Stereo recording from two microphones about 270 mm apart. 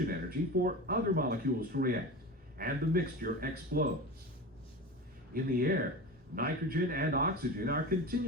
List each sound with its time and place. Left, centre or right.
0.1 s speech: right
5.3 s speech: right